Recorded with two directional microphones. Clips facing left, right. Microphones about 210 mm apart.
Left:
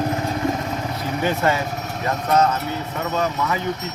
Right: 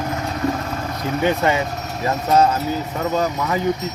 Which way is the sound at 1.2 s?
20° right (ahead or behind).